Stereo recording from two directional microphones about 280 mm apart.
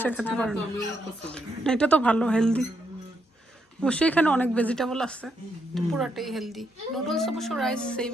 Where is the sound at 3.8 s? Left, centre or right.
Centre.